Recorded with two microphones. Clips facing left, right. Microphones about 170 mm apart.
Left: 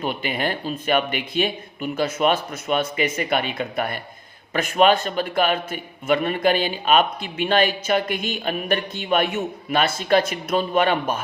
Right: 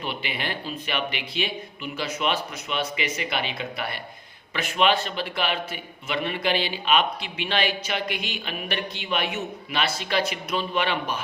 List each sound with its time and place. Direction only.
0.0 s a man's voice: 45° left (ahead or behind)